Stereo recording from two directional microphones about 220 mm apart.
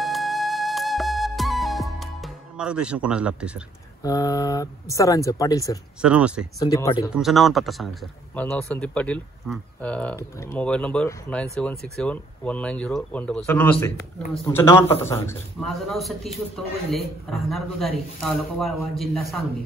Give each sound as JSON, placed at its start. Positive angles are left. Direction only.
{"t": 0.0, "sound": "music", "side_deg": 0}
{"t": 4.0, "sound": "speech", "side_deg": 15}
{"t": 5.9, "sound": "a man's voice", "side_deg": -5}
{"t": 6.6, "sound": "speech", "side_deg": 15}
{"t": 7.2, "sound": "a man's voice", "side_deg": 0}
{"t": 15.6, "sound": "a man's voice", "side_deg": 0}